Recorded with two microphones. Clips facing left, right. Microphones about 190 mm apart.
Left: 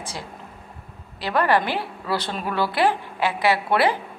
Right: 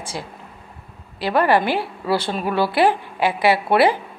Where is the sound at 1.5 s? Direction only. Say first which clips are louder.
Right 3 dB; 10° right (ahead or behind).